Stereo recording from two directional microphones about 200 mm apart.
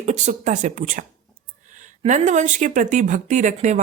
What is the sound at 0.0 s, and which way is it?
Speech, 35° right (ahead or behind).